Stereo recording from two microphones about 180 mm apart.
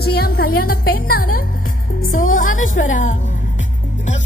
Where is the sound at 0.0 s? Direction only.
60° left (ahead or behind).